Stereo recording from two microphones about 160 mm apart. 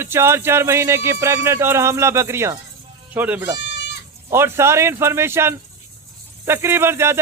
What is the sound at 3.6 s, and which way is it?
Goat, 90° left.